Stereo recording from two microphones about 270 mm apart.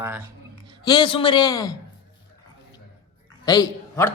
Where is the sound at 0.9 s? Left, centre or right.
Centre.